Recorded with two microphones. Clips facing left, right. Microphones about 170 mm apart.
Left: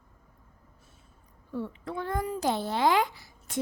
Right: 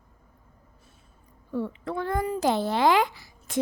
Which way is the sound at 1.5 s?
90° right.